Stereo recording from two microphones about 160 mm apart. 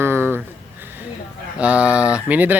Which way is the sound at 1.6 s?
5° right (ahead or behind).